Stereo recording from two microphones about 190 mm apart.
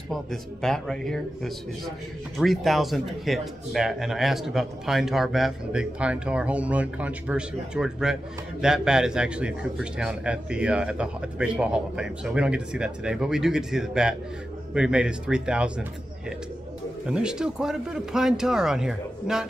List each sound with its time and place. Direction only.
0.1 s speech: centre (ahead or behind)
17.0 s speech: 5° right (ahead or behind)